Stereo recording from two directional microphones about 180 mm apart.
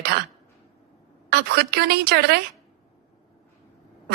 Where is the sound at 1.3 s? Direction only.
65° right (ahead or behind).